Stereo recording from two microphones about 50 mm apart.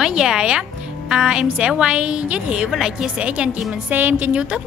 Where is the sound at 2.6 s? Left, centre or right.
Centre.